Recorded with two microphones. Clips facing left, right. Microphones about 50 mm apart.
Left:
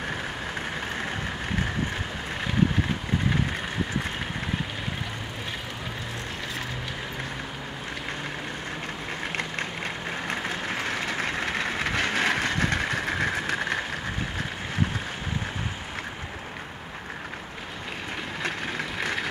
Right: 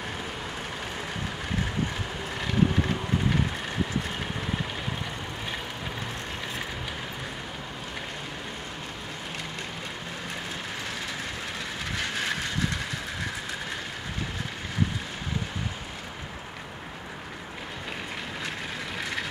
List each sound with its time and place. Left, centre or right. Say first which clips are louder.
10.9 s train: left 6 dB; left